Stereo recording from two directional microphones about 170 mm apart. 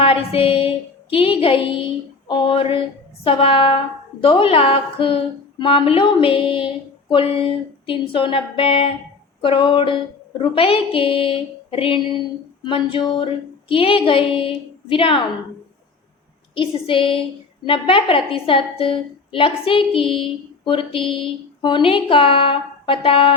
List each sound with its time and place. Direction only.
0.0 s a woman's voice: 35° left (ahead or behind)
12.6 s a sound: 30° left (ahead or behind)
13.7 s a woman's voice: 30° left (ahead or behind)
16.6 s a woman's voice: 30° left (ahead or behind)